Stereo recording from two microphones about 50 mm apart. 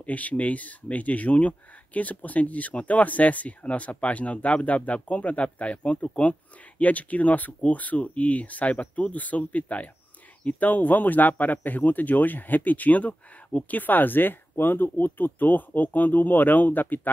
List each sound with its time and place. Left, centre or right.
0.0 s speech: left